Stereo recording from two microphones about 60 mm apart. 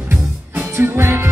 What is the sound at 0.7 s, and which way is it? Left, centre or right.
Music, right.